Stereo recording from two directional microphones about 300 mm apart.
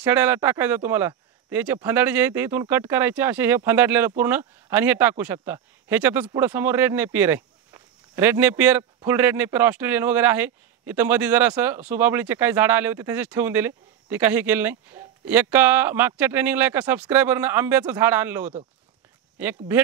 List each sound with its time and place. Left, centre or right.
0.0 s speech: centre